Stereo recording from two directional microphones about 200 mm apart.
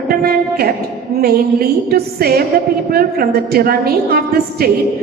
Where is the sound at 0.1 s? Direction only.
50° right (ahead or behind).